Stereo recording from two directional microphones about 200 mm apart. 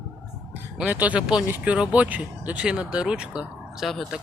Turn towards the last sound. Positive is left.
turn(degrees=0)  # may be behind; listen again after turning